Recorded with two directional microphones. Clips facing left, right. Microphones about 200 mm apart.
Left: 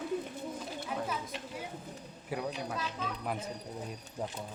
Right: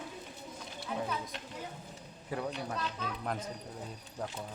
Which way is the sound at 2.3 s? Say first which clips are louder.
Even; 5° left (ahead or behind).